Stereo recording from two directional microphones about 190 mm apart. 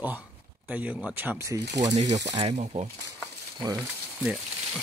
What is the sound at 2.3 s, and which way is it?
Speech, 25° right (ahead or behind).